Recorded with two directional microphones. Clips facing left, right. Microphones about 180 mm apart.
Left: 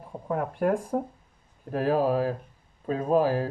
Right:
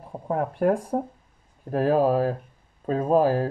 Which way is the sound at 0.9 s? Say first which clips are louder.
Right 2 dB; 35° right (ahead or behind).